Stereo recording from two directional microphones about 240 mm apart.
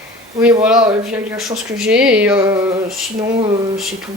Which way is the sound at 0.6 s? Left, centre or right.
Centre.